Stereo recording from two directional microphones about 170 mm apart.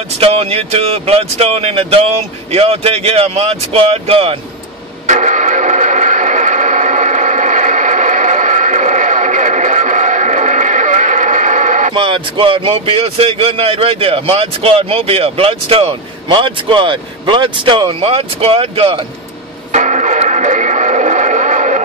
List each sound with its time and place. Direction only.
0.2 s a man's voice: 35° right (ahead or behind)
5.0 s radio: 45° right (ahead or behind)
11.9 s a man's voice: 30° right (ahead or behind)
19.7 s music: 45° right (ahead or behind)